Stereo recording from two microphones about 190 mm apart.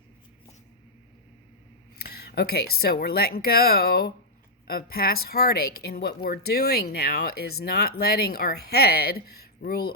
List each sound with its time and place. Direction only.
2.0 s speech: 60° left (ahead or behind)